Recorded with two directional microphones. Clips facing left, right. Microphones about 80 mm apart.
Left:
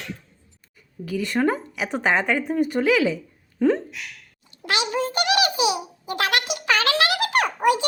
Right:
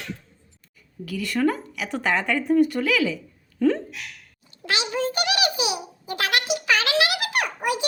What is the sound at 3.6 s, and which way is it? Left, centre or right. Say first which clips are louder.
Speech: left 1 dB; left.